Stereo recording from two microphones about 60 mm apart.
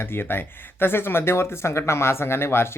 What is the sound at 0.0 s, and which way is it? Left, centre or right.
Speech, left.